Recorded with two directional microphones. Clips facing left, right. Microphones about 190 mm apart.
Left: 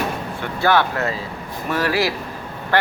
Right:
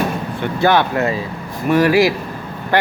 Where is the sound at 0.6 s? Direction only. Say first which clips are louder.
Right 3 dB; 20° right (ahead or behind).